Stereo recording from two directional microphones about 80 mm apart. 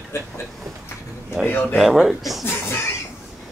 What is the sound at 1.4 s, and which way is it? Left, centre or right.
Chuckle, left.